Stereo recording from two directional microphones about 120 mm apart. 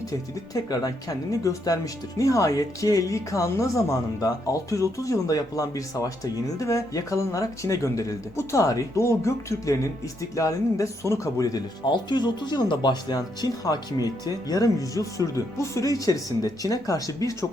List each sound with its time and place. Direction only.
0.5 s speech: 30° left (ahead or behind)